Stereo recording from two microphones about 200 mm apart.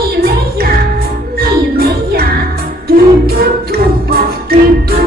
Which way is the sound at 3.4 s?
50° right (ahead or behind).